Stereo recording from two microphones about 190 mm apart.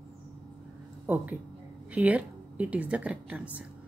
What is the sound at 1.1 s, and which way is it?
A woman's voice, 10° right (ahead or behind).